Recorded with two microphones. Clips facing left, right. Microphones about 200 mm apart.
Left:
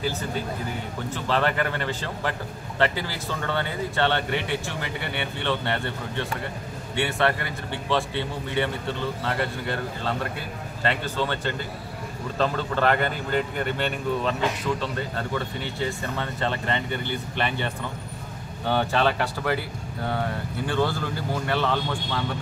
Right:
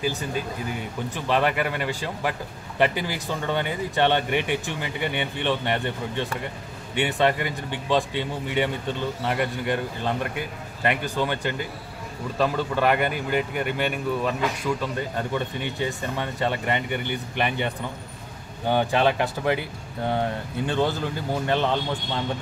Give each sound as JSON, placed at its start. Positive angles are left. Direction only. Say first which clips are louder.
{"t": 1.1, "sound": "speech", "louder": "right 1 dB", "side_deg": -15}